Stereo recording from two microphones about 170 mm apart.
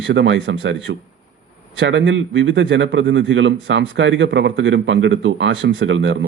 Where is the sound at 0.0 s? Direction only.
90° right.